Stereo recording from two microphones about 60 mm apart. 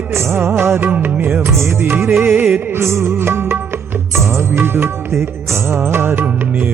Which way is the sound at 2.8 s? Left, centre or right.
Right.